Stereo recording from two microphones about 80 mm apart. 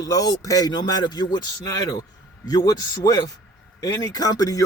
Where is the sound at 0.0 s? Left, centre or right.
Left.